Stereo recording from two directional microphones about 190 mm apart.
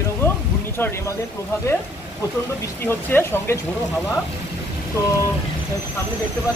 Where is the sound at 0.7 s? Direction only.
10° left (ahead or behind).